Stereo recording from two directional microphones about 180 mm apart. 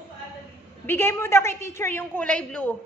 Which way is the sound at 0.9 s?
15° left (ahead or behind).